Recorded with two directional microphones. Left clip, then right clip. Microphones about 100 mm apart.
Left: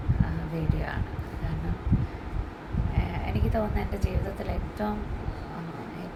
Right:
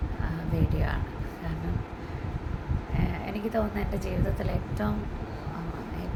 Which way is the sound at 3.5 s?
35° right (ahead or behind).